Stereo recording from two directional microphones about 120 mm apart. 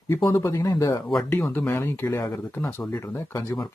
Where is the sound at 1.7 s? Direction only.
20° left (ahead or behind).